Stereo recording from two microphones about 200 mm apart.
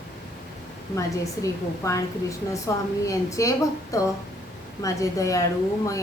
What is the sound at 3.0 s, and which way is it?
A woman's voice, 15° left (ahead or behind).